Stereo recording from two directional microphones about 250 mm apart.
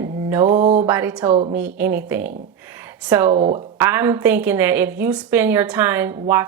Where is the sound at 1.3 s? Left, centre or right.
Right.